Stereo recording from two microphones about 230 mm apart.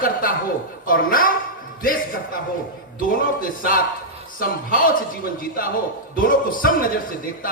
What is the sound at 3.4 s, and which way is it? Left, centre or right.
A man's voice, left.